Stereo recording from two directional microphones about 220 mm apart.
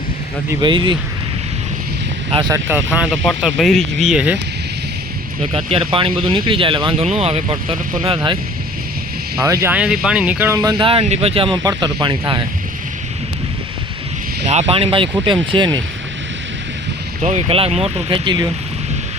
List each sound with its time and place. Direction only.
0.6 s speech: 20° right (ahead or behind)
2.3 s speech: 20° right (ahead or behind)
2.6 s speech: 5° right (ahead or behind)
5.4 s speech: 25° right (ahead or behind)
9.4 s speech: 15° right (ahead or behind)
14.4 s speech: 30° right (ahead or behind)
17.2 s speech: 30° right (ahead or behind)